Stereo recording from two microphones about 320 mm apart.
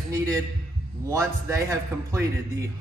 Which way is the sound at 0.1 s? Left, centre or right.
Centre.